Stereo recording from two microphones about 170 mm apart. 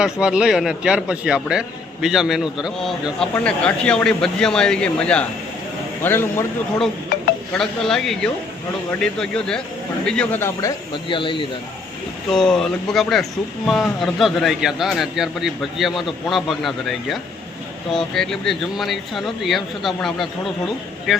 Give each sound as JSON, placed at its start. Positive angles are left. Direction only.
{"t": 0.0, "sound": "a man's voice", "side_deg": -5}
{"t": 7.5, "sound": "a man's voice", "side_deg": 5}
{"t": 11.1, "sound": "speech", "side_deg": 30}
{"t": 12.3, "sound": "a man's voice", "side_deg": 5}